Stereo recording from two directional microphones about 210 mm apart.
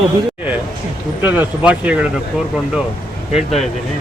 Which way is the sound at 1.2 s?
5° right (ahead or behind).